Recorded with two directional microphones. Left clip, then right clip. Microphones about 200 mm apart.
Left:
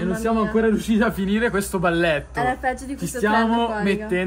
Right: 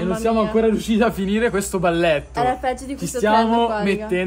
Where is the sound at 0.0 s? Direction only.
Centre (ahead or behind).